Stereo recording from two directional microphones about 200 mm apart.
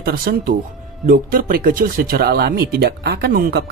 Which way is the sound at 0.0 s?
50° right (ahead or behind).